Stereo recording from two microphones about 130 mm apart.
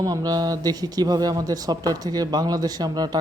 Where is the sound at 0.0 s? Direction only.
30° right (ahead or behind).